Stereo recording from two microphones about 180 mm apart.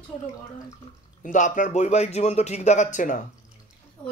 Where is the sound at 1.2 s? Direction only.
45° left (ahead or behind).